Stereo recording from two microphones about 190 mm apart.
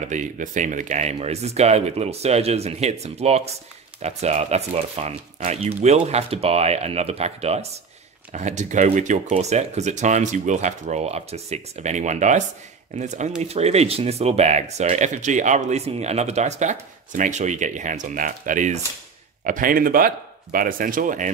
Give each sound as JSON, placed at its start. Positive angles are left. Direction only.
{"t": 0.0, "sound": "speech", "side_deg": -40}